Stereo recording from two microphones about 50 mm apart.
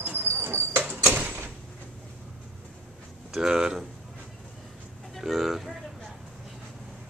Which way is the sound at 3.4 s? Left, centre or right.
Centre.